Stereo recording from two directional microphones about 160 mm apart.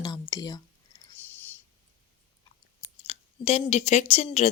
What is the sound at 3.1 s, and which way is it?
Speech, 40° left (ahead or behind).